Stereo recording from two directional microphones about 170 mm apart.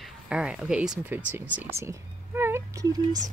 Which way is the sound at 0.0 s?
5° right (ahead or behind).